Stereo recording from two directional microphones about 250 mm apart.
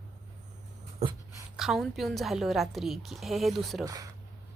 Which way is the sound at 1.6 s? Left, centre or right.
Centre.